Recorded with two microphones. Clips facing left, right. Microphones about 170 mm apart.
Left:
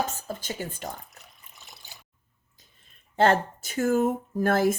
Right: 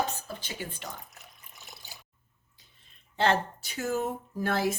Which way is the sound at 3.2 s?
50° left (ahead or behind).